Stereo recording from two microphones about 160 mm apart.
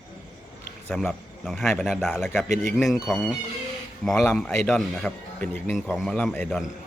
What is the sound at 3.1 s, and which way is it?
Speech, centre (ahead or behind).